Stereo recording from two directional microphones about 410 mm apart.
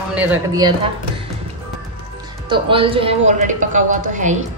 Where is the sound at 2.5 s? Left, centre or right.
Centre.